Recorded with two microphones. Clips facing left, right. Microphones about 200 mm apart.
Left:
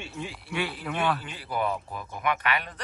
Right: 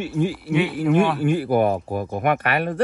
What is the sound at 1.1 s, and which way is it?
Speech, 50° right (ahead or behind).